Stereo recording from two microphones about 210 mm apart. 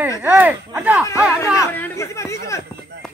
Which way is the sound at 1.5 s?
10° left (ahead or behind).